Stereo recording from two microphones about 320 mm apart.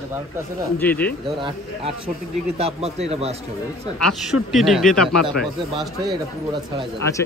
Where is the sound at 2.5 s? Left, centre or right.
Centre.